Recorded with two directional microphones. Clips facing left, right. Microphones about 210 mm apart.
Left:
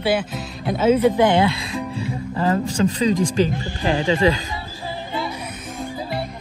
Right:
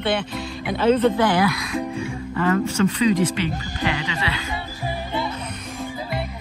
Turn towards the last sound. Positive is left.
turn(degrees=40)  # may be behind; listen again after turning